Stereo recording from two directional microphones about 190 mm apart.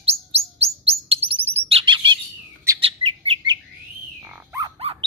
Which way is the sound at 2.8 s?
30° right (ahead or behind).